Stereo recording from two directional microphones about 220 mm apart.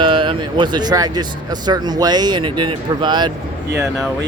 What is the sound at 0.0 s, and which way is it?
Speech, 20° right (ahead or behind).